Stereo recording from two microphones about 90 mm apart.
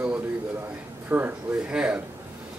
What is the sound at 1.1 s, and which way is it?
Speech, 20° right (ahead or behind).